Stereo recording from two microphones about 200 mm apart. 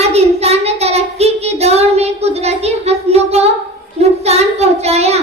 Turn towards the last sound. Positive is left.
turn(degrees=-30)  # may be behind; listen again after turning